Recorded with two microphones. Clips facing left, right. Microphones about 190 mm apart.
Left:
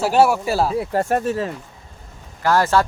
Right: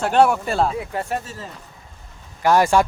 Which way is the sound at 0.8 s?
45° left (ahead or behind).